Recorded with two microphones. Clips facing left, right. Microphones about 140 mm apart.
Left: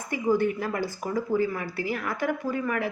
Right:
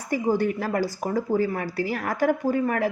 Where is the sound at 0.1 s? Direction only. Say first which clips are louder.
Right 1 dB; 35° right (ahead or behind).